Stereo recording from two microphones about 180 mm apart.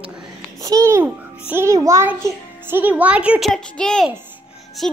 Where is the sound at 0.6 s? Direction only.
20° right (ahead or behind).